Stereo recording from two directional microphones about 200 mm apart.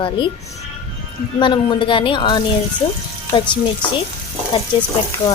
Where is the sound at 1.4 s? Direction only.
25° left (ahead or behind).